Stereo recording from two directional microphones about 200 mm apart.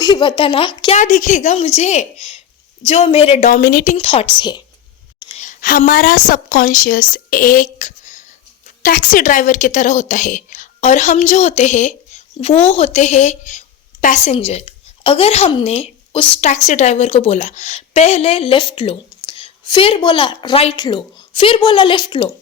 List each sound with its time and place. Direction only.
0.0 s speech: 20° left (ahead or behind)
3.5 s a woman's voice: 50° left (ahead or behind)
3.9 s a woman's voice: 30° left (ahead or behind)
5.2 s a sound: 25° left (ahead or behind)
5.5 s a woman's voice: 45° left (ahead or behind); by 22.3 s 20° left (ahead or behind)